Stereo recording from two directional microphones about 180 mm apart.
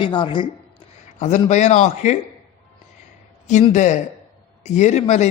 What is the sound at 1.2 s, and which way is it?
Speech, 40° left (ahead or behind).